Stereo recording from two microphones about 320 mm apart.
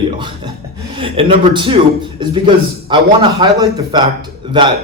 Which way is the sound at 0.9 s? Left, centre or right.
Centre.